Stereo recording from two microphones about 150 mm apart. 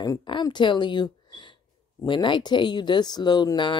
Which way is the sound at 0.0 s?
25° left (ahead or behind).